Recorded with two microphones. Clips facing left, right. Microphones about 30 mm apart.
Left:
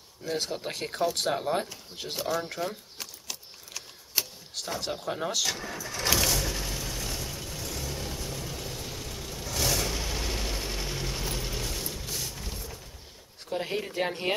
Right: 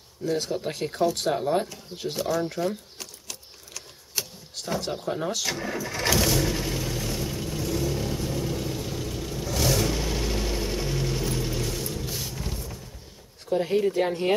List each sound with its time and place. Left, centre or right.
0.2 s speech: centre
4.8 s speech: centre
5.6 s speech: centre
6.0 s vehicle: centre
13.5 s speech: centre